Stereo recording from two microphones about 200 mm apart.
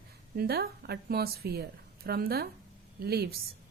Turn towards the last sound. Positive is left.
turn(degrees=-50)  # may be behind; listen again after turning